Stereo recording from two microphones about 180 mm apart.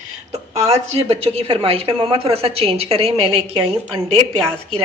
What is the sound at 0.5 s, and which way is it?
A woman's voice, 35° right (ahead or behind).